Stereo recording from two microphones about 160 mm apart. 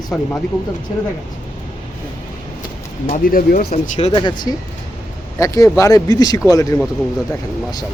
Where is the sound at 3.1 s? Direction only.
60° left (ahead or behind).